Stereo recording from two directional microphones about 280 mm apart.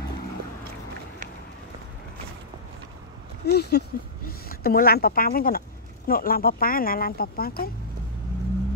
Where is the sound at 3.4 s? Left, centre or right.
Left.